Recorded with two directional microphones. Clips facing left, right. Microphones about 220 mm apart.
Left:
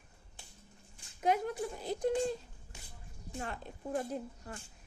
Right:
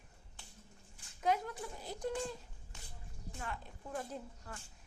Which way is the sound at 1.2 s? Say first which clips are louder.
Left 4 dB; 15° left (ahead or behind).